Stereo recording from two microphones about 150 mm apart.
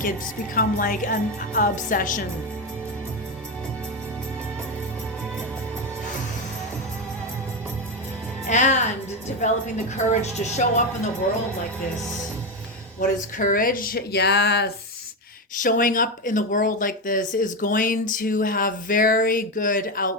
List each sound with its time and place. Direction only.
0.5 s speech: 70° left (ahead or behind)
8.4 s a woman's voice: 50° left (ahead or behind)
13.0 s speech: 65° left (ahead or behind); by 14.7 s 90° left
15.5 s speech: 65° left (ahead or behind)